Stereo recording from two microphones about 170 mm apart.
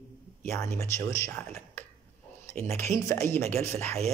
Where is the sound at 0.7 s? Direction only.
15° left (ahead or behind).